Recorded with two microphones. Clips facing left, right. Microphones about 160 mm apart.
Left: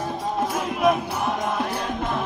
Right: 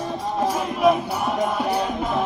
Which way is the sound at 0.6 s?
Centre (ahead or behind).